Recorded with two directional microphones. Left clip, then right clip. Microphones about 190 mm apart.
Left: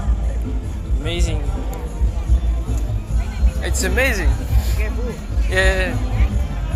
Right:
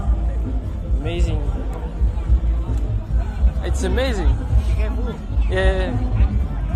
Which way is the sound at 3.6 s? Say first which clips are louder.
Left 4 dB; 15° right (ahead or behind).